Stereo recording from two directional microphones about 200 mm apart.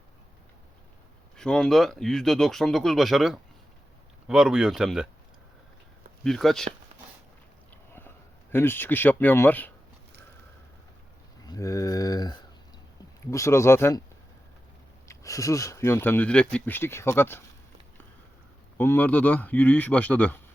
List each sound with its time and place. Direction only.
1.4 s speech: 5° left (ahead or behind)
6.2 s speech: centre (ahead or behind)
8.5 s speech: 10° left (ahead or behind)
11.4 s speech: 15° left (ahead or behind)
15.0 s speech: 15° left (ahead or behind)
18.8 s speech: 10° left (ahead or behind)